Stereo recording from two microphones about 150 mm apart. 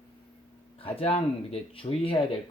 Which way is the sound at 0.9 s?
40° left (ahead or behind).